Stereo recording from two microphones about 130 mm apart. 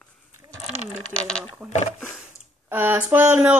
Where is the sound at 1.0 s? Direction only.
5° left (ahead or behind).